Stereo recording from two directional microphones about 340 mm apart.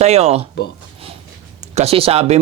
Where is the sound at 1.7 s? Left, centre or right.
Centre.